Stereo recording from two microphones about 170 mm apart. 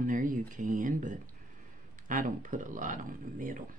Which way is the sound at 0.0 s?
50° right (ahead or behind).